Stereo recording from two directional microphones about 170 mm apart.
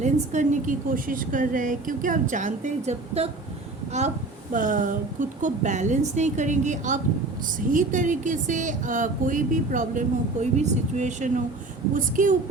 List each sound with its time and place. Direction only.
0.0 s a woman's voice: 45° right (ahead or behind)
4.5 s a woman's voice: 50° right (ahead or behind)